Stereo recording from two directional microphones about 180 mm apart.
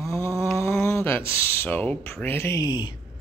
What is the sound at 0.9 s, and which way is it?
Speech, 15° left (ahead or behind).